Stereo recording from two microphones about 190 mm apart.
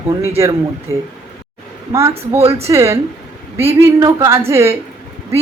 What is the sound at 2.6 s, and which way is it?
Speech, 15° right (ahead or behind).